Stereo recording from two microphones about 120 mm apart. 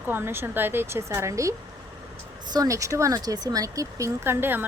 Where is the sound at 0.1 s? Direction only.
20° right (ahead or behind).